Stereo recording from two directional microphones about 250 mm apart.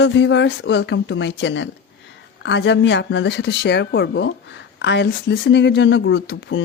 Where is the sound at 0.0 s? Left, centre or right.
Left.